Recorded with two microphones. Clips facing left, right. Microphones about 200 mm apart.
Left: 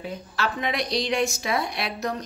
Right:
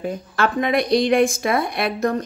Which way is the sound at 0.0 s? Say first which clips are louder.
Right 7 dB; 50° right (ahead or behind).